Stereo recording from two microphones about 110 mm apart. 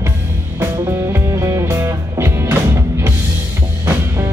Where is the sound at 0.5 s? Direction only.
25° right (ahead or behind).